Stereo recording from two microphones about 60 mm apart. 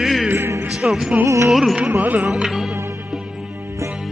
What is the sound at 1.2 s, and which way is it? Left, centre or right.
Music, right.